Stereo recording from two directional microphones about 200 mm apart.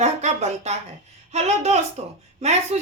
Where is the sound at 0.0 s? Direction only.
35° right (ahead or behind).